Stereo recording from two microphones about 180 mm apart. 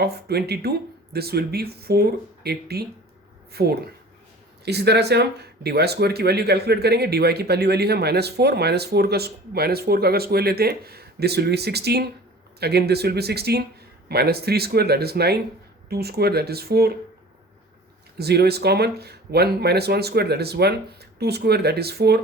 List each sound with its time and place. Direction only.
0.0 s speech: 60° right (ahead or behind)
18.2 s speech: 65° right (ahead or behind)